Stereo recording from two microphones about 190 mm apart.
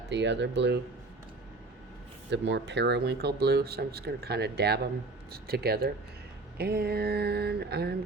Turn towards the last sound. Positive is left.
turn(degrees=-55)  # may be behind; listen again after turning